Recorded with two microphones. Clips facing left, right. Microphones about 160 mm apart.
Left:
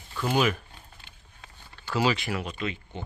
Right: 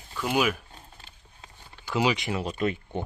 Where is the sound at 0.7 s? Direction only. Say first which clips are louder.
Right 2 dB; 30° right (ahead or behind).